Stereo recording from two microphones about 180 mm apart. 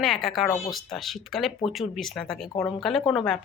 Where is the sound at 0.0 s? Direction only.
Centre (ahead or behind).